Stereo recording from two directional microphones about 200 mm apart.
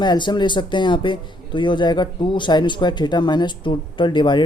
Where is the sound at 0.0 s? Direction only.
20° left (ahead or behind).